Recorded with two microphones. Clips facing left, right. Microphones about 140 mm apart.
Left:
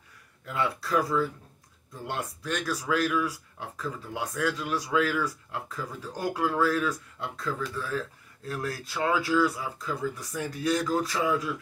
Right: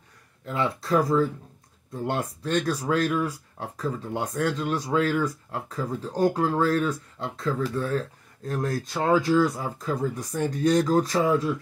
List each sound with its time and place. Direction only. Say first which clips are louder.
0.5 s speech: right 4 dB; 35° right (ahead or behind)